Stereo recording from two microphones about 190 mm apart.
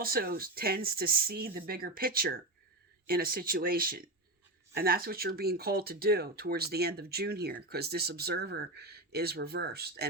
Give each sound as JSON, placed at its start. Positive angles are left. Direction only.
{"t": 0.0, "sound": "speech", "side_deg": -50}